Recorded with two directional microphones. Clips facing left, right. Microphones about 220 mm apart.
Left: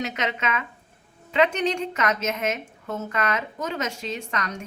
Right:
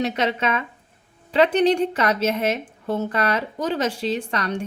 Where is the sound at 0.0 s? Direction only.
35° right (ahead or behind).